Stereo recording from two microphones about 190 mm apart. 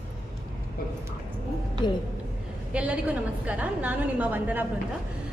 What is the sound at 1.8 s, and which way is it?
Speech, 25° left (ahead or behind).